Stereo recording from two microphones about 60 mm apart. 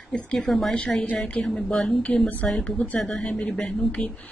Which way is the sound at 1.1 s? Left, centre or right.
Centre.